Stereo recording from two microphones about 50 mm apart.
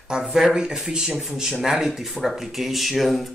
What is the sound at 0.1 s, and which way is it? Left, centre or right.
Speech, centre.